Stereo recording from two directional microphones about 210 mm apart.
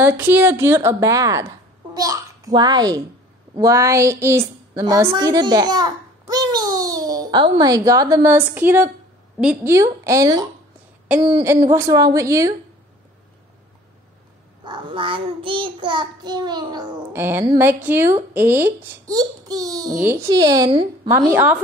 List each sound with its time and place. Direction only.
0.0 s a child's voice: 10° right (ahead or behind)
11.1 s child singing: 20° right (ahead or behind)
11.7 s a child's voice: 15° right (ahead or behind)
14.6 s child singing: 20° right (ahead or behind)
17.8 s a child's voice: 10° right (ahead or behind)
21.3 s a child's voice: 10° right (ahead or behind)